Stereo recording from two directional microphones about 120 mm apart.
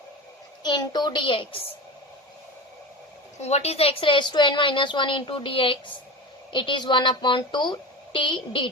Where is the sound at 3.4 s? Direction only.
65° left (ahead or behind).